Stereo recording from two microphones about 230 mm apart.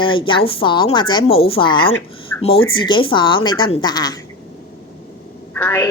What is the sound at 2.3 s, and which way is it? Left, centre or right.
Speech, centre.